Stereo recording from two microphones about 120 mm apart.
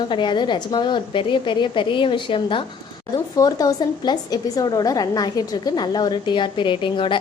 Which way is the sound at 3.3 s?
30° left (ahead or behind).